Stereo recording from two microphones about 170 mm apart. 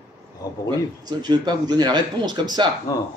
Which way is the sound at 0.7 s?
25° right (ahead or behind).